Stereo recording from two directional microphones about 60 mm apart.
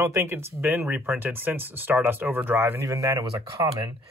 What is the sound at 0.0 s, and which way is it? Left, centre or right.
Speech, right.